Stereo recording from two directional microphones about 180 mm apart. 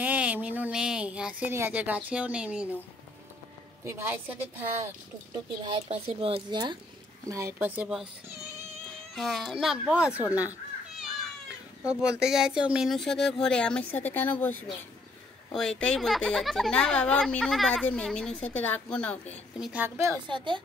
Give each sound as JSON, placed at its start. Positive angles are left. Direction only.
{"t": 0.0, "sound": "a sound", "side_deg": -10}
{"t": 3.8, "sound": "speech", "side_deg": -10}
{"t": 5.6, "sound": "speech", "side_deg": -30}
{"t": 9.1, "sound": "speech", "side_deg": 0}
{"t": 11.9, "sound": "speech", "side_deg": -5}
{"t": 19.6, "sound": "speech", "side_deg": -10}
{"t": 20.2, "sound": "speech", "side_deg": -25}